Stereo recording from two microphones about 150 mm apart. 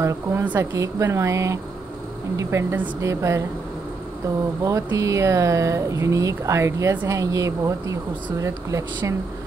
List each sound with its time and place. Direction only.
0.0 s speech: 20° right (ahead or behind)
4.6 s speech: 20° right (ahead or behind)